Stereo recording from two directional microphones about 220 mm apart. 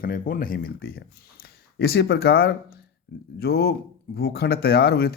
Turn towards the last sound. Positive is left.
turn(degrees=45)  # may be behind; listen again after turning